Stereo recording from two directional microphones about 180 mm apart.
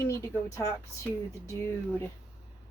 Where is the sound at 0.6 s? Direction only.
15° left (ahead or behind).